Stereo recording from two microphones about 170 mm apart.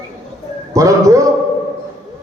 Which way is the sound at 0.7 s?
20° right (ahead or behind).